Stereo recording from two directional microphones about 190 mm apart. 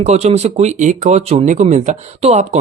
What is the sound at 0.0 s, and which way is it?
Speech, 35° right (ahead or behind).